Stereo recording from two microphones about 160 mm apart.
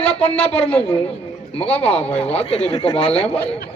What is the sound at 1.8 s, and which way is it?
Speech, 40° left (ahead or behind).